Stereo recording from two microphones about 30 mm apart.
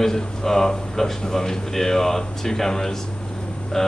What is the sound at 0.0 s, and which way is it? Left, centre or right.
Speech, centre.